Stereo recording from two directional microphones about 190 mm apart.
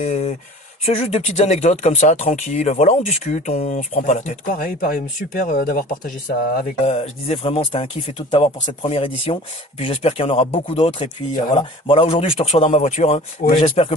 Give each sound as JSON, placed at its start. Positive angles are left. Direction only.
{"t": 0.0, "sound": "speech", "side_deg": 35}
{"t": 6.6, "sound": "speech", "side_deg": 35}